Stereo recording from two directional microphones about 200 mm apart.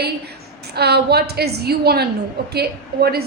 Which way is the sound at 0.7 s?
55° right (ahead or behind).